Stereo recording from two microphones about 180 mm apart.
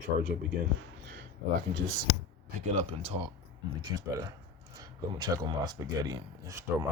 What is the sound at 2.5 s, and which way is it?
Speech, 35° right (ahead or behind).